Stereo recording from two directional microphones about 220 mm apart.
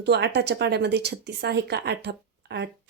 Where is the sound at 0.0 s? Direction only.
50° right (ahead or behind).